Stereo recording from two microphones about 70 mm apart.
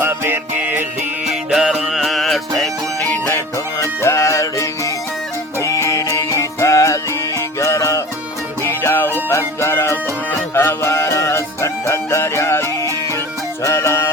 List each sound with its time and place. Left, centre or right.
0.0 s music: right
1.3 s music: centre
1.9 s music: centre
3.8 s music: left
8.6 s music: left
9.6 s music: left